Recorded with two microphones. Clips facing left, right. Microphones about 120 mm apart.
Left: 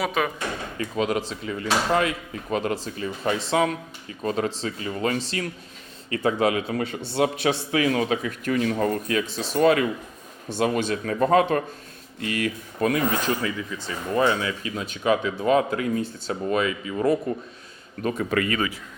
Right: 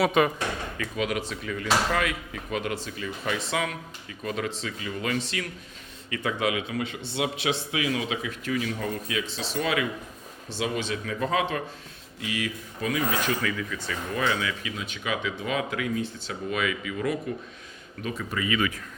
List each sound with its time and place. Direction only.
0.0 s speech: centre (ahead or behind)
0.8 s a man's voice: 35° left (ahead or behind); by 13.0 s 55° left (ahead or behind)
13.2 s speech: 25° left (ahead or behind)
18.3 s speech: 90° left